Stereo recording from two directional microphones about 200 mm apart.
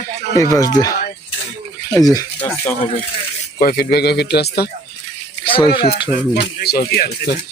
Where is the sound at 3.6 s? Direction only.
50° left (ahead or behind).